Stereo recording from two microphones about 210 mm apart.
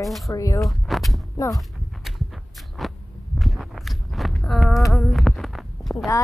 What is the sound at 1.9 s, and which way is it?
Walk, centre (ahead or behind).